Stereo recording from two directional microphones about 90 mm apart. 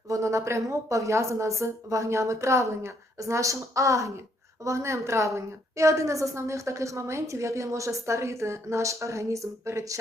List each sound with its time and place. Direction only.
0.1 s a woman's voice: 35° right (ahead or behind)